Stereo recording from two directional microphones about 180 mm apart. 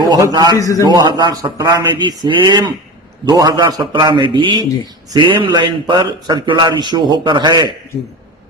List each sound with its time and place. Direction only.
0.1 s speech: 20° right (ahead or behind)
0.5 s a man's voice: 20° left (ahead or behind)
0.8 s speech: 25° right (ahead or behind)